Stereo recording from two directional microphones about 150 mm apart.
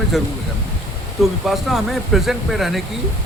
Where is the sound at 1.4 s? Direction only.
Centre (ahead or behind).